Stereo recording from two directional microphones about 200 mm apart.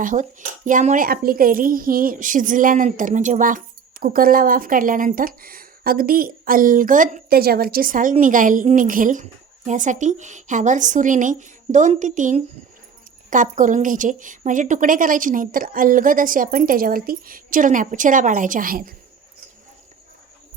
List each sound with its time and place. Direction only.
0.0 s a woman's voice: 40° right (ahead or behind)